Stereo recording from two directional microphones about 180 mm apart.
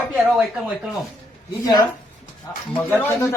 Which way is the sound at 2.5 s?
20° left (ahead or behind).